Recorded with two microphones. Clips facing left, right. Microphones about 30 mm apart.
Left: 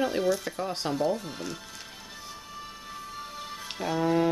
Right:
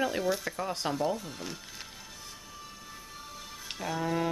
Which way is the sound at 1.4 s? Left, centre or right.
Centre.